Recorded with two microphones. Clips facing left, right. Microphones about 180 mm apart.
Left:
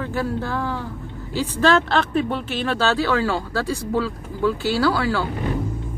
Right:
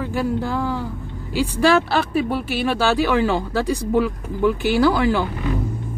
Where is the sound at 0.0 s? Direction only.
15° right (ahead or behind).